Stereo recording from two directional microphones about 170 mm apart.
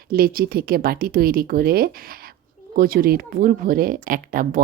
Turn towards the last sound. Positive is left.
turn(degrees=-55)  # may be behind; listen again after turning